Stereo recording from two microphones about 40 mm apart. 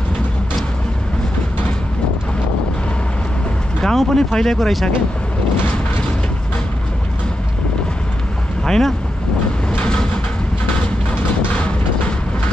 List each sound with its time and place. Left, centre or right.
3.8 s speech: centre
8.6 s speech: centre
9.7 s vehicle: left